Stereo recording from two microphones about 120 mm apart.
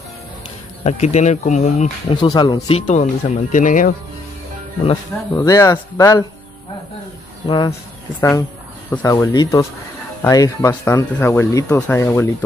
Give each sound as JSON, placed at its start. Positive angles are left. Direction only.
{"t": 0.8, "sound": "speech", "side_deg": 70}
{"t": 2.0, "sound": "speech", "side_deg": 35}
{"t": 2.9, "sound": "speech", "side_deg": 90}
{"t": 5.3, "sound": "speech", "side_deg": 25}
{"t": 7.4, "sound": "speech", "side_deg": 40}
{"t": 8.2, "sound": "speech", "side_deg": 25}
{"t": 10.7, "sound": "speech", "side_deg": 20}